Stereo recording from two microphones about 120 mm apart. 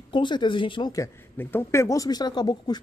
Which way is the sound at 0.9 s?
20° left (ahead or behind).